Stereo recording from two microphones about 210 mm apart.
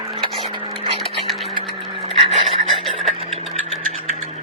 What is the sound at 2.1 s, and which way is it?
Pant, 25° right (ahead or behind).